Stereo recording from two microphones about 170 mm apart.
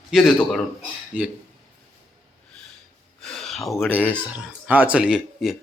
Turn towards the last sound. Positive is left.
turn(degrees=-5)  # may be behind; listen again after turning